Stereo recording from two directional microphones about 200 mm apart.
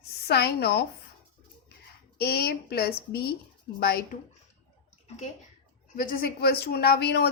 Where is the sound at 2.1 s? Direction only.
50° left (ahead or behind).